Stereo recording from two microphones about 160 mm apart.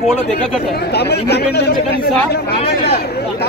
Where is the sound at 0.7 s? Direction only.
90° left.